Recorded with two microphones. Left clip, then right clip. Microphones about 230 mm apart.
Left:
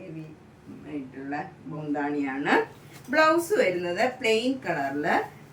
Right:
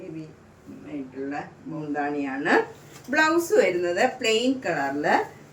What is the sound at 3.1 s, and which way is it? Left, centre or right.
A woman's voice, centre.